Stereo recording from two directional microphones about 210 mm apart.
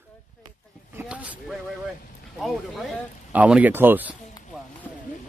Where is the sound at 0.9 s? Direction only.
5° right (ahead or behind).